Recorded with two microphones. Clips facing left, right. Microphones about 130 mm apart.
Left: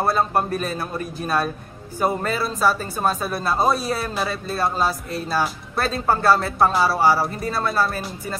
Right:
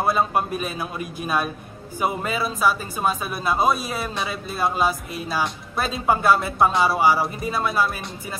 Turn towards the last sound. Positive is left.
turn(degrees=-10)  # may be behind; listen again after turning